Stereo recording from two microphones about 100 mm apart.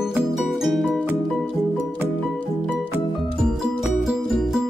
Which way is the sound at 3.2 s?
Centre (ahead or behind).